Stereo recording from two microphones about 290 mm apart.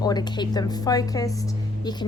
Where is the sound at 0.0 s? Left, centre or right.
Centre.